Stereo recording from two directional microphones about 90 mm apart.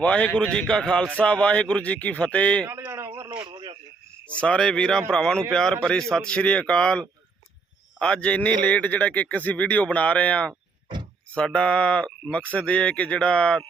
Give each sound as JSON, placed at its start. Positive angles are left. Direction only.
{"t": 0.0, "sound": "a man's voice", "side_deg": 15}
{"t": 2.6, "sound": "a sound", "side_deg": -30}
{"t": 3.5, "sound": "cricket", "side_deg": -55}
{"t": 4.4, "sound": "a man's voice", "side_deg": 10}